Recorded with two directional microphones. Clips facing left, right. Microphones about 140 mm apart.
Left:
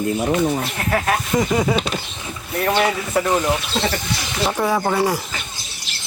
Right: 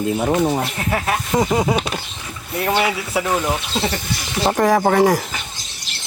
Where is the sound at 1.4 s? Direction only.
25° right (ahead or behind).